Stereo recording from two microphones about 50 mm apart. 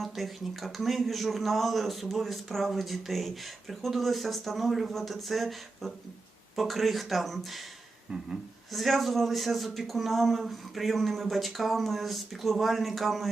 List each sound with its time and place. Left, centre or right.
0.0 s a man's voice: centre
8.1 s a sound: centre
8.7 s a man's voice: centre